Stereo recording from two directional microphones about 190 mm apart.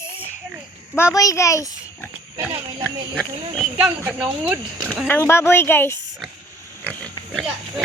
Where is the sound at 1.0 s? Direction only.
15° left (ahead or behind).